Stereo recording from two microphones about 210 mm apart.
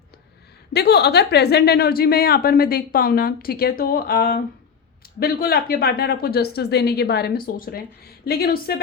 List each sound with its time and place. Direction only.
0.7 s a woman's voice: 50° left (ahead or behind)